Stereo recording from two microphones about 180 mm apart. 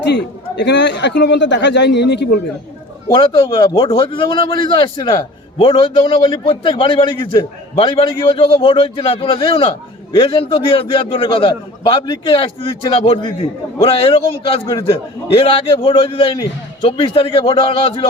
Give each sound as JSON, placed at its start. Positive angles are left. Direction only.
{"t": 0.0, "sound": "a man's voice", "side_deg": 70}
{"t": 3.1, "sound": "a man's voice", "side_deg": 30}